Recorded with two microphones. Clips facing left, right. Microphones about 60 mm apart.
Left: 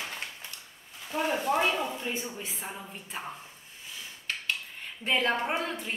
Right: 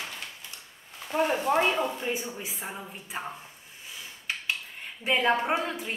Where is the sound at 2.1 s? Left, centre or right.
Centre.